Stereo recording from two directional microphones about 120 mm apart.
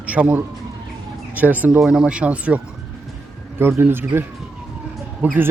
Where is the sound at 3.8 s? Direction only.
20° right (ahead or behind).